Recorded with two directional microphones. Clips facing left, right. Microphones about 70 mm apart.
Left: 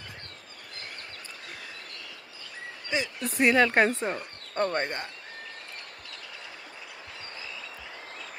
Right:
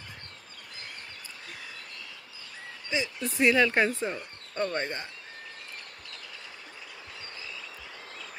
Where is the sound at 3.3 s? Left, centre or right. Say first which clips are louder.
Left 1 dB; left.